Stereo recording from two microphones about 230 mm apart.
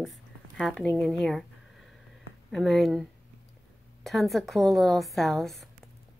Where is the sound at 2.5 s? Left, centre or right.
Centre.